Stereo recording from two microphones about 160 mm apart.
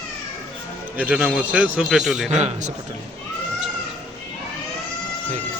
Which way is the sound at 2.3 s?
45° right (ahead or behind).